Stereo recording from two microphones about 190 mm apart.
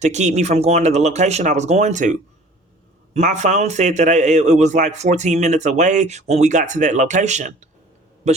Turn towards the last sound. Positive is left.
turn(degrees=-40)  # may be behind; listen again after turning